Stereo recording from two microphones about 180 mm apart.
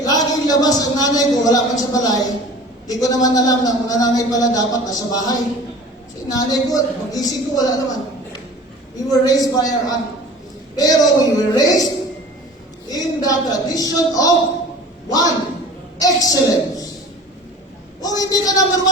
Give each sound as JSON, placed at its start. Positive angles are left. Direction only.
{"t": 0.0, "sound": "a man's voice", "side_deg": 20}
{"t": 12.9, "sound": "a man's voice", "side_deg": 20}
{"t": 16.0, "sound": "a man's voice", "side_deg": 20}
{"t": 18.0, "sound": "a man's voice", "side_deg": 20}